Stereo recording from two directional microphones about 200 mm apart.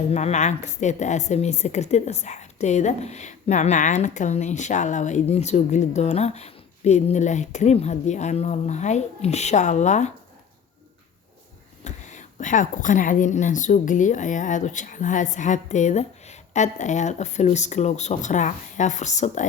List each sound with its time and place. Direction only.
0.1 s a woman's voice: 35° left (ahead or behind)
11.8 s a woman's voice: 35° left (ahead or behind)